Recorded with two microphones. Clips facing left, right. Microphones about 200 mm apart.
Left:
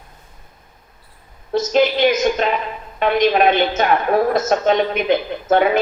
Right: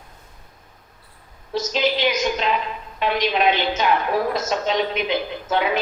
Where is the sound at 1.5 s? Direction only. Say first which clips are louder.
Left 6 dB; 50° left (ahead or behind).